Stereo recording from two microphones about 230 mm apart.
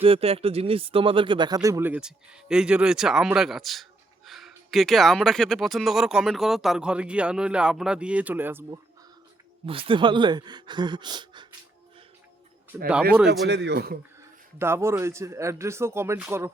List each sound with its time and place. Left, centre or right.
0.0 s speech: right; by 8.8 s centre
9.6 s speech: right
12.7 s speech: centre
13.5 s speech: right
14.6 s speech: centre